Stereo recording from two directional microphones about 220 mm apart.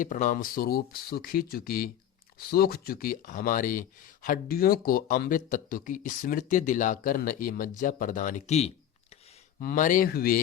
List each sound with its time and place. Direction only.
0.0 s speech: 35° left (ahead or behind)